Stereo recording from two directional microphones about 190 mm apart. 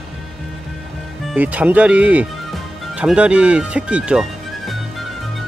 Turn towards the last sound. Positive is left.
turn(degrees=-5)  # may be behind; listen again after turning